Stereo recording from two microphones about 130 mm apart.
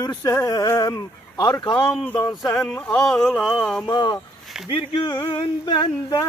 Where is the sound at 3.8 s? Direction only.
35° left (ahead or behind).